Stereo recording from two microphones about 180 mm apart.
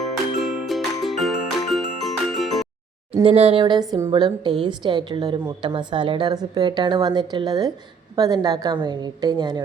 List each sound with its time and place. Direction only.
0.0 s music: centre (ahead or behind)
3.2 s a woman's voice: 35° right (ahead or behind)